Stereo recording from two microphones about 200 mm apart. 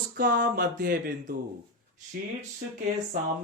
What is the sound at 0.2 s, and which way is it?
Speech, 45° right (ahead or behind).